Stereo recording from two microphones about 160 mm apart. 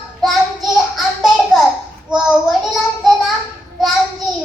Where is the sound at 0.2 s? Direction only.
Centre (ahead or behind).